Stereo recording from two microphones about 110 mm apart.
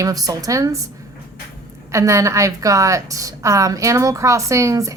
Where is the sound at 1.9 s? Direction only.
25° right (ahead or behind).